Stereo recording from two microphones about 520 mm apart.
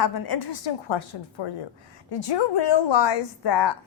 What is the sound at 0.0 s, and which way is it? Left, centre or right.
A woman's voice, left.